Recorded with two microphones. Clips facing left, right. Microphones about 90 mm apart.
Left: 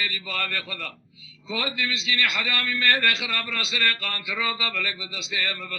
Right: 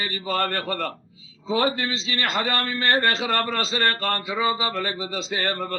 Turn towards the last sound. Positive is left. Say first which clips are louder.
# right 5 dB
turn(degrees=-45)  # may be behind; listen again after turning